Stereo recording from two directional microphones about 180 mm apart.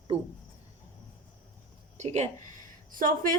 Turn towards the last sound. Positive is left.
turn(degrees=-50)  # may be behind; listen again after turning